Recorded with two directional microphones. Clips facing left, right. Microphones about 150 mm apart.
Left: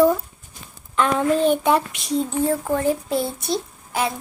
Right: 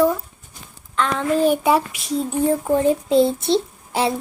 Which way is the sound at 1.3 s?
5° right (ahead or behind).